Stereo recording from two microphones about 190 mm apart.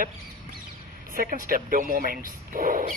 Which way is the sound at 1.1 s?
45° right (ahead or behind).